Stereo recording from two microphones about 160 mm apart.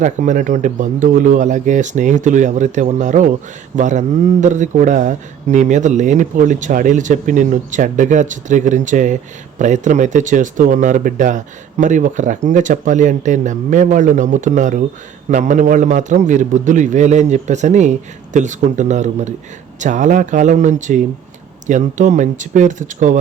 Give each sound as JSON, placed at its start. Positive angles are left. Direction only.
{"t": 0.0, "sound": "speech", "side_deg": -50}